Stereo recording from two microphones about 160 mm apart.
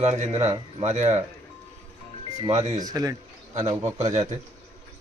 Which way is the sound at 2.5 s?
45° right (ahead or behind).